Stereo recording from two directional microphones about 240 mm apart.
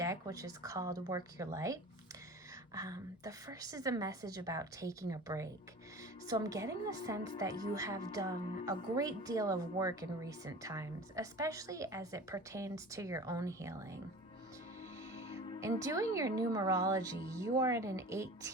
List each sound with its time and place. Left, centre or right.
0.0 s speech: centre
15.2 s music: left
15.6 s speech: centre